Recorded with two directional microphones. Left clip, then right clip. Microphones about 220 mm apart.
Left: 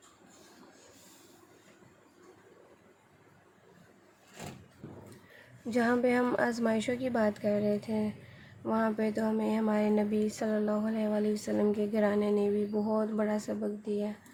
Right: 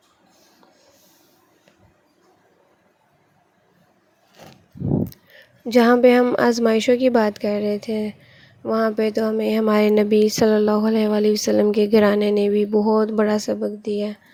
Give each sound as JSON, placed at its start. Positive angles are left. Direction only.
{"t": 5.6, "sound": "speech", "side_deg": -40}